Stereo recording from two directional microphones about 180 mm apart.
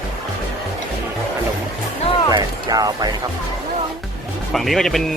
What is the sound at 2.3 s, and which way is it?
Speech, 20° right (ahead or behind).